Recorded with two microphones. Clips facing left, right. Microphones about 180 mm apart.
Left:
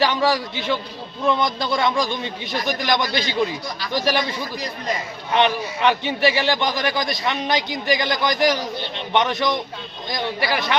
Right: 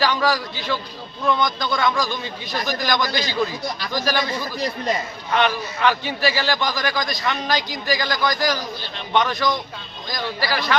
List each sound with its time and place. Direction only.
0.0 s a man's voice: 25° left (ahead or behind)
5.3 s a man's voice: 20° left (ahead or behind)